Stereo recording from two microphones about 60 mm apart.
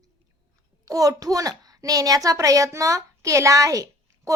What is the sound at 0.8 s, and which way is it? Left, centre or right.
A woman's voice, right.